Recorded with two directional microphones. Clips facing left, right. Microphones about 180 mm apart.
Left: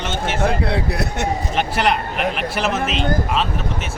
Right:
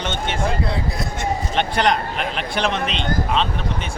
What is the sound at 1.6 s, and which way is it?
Speech, 5° left (ahead or behind).